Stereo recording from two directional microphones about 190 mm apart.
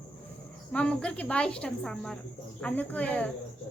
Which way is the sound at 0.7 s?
5° left (ahead or behind).